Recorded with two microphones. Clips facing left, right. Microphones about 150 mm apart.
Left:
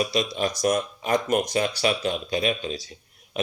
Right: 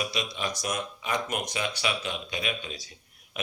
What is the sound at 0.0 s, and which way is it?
Speech, 35° left (ahead or behind).